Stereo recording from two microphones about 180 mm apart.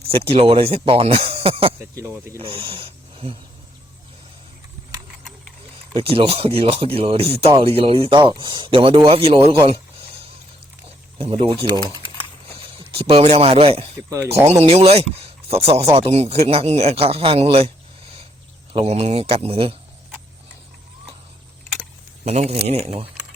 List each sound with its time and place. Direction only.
0.1 s speech: 30° right (ahead or behind)
2.0 s speech: 15° right (ahead or behind)
2.4 s speech: 30° right (ahead or behind)
5.9 s speech: 30° right (ahead or behind)
10.8 s speech: 35° right (ahead or behind)
13.0 s speech: 30° right (ahead or behind)
18.7 s speech: 35° right (ahead or behind)
22.2 s a man's voice: 35° right (ahead or behind)